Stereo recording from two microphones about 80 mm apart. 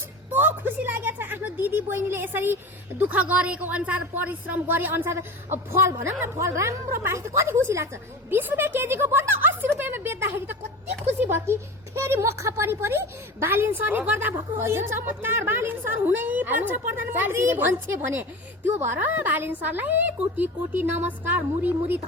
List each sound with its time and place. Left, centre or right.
0.3 s a woman's voice: right
8.3 s a sound: right
11.2 s a woman's voice: right